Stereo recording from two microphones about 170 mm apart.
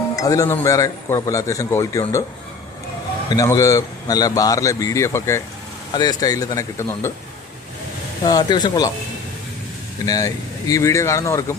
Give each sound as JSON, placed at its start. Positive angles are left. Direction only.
{"t": 0.2, "sound": "a man's voice", "side_deg": 20}
{"t": 3.2, "sound": "a man's voice", "side_deg": 20}
{"t": 8.2, "sound": "a man's voice", "side_deg": 20}
{"t": 10.1, "sound": "a man's voice", "side_deg": 20}